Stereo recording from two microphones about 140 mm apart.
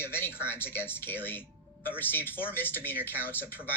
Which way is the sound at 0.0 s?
15° left (ahead or behind).